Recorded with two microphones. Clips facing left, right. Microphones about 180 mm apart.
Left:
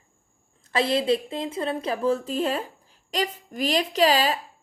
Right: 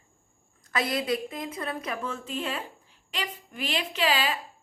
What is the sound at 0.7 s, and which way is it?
A woman's voice, 30° left (ahead or behind).